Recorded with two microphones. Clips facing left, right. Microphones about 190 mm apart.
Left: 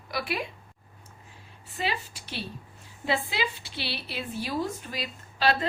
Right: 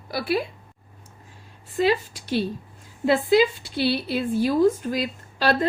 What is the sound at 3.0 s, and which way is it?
Speech, 45° right (ahead or behind).